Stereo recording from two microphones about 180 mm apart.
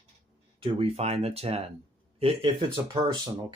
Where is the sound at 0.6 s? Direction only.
35° right (ahead or behind).